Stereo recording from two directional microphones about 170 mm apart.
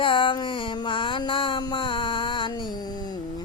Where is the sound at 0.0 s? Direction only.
30° left (ahead or behind).